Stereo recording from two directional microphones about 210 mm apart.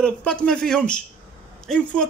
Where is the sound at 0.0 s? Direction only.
5° left (ahead or behind).